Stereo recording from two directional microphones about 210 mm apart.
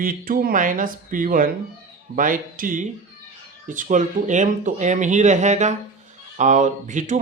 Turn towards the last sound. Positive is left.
turn(degrees=-35)  # may be behind; listen again after turning